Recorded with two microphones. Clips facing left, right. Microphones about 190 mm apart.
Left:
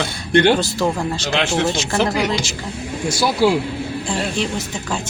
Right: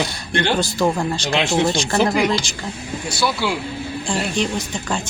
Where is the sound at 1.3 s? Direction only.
15° right (ahead or behind).